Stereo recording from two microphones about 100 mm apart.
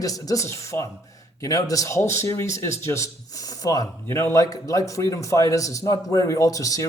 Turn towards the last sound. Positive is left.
turn(degrees=35)  # may be behind; listen again after turning